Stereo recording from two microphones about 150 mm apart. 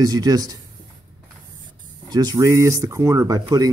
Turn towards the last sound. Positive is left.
turn(degrees=-25)  # may be behind; listen again after turning